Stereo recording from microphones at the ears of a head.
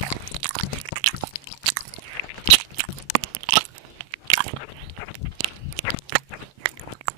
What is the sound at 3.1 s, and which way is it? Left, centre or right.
Crunch, right.